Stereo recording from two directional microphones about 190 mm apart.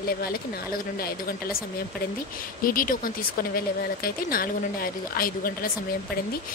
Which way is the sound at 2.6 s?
50° left (ahead or behind).